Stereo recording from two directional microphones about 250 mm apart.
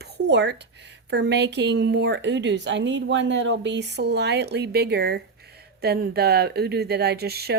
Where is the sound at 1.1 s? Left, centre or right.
Right.